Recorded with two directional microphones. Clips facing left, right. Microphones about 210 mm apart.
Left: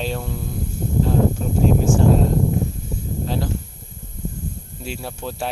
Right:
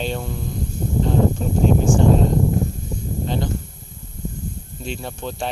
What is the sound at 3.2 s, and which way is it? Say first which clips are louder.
Speech: right 1 dB; 5° left (ahead or behind).